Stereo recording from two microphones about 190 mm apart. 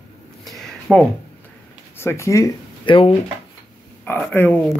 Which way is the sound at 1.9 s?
15° left (ahead or behind).